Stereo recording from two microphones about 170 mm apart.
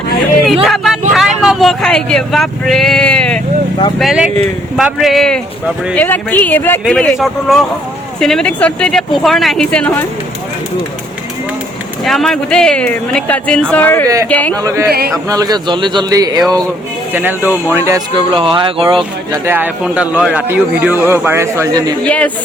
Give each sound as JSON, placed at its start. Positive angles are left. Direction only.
{"t": 0.4, "sound": "a sound", "side_deg": 0}
{"t": 1.1, "sound": "vehicle", "side_deg": 0}
{"t": 3.9, "sound": "speech", "side_deg": 0}
{"t": 6.0, "sound": "a man's voice", "side_deg": 10}
{"t": 12.0, "sound": "a man's voice", "side_deg": 0}
{"t": 14.5, "sound": "a man's voice", "side_deg": -20}
{"t": 17.1, "sound": "a man's voice", "side_deg": -10}
{"t": 18.3, "sound": "a man's voice", "side_deg": -30}
{"t": 19.3, "sound": "a man's voice", "side_deg": -10}
{"t": 22.0, "sound": "a man's voice", "side_deg": 5}